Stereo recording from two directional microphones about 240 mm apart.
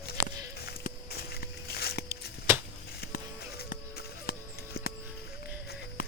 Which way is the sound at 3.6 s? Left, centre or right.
Left.